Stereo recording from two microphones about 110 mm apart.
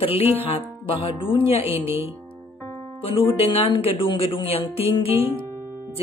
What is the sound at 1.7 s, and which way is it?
Speech, 20° right (ahead or behind).